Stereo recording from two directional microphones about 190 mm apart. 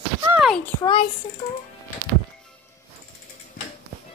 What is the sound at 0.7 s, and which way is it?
Speech, 25° left (ahead or behind).